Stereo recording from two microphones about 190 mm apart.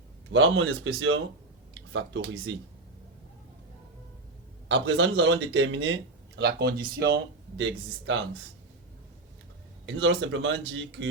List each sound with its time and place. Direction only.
0.3 s speech: 80° right
1.7 s speech: 80° right
4.7 s speech: 75° right (ahead or behind)
9.8 s speech: 80° right